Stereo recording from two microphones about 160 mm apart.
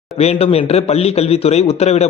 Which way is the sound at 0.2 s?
40° left (ahead or behind).